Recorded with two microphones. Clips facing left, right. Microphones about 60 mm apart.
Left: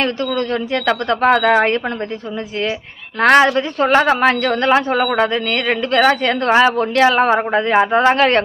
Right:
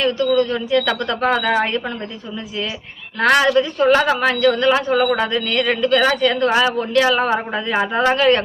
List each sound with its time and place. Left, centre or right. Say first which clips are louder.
0.3 s speech: right 2 dB; left
3.2 s speech: left 3 dB; left